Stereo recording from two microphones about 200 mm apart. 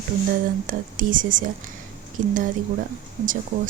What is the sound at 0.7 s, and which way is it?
Speech, 40° right (ahead or behind).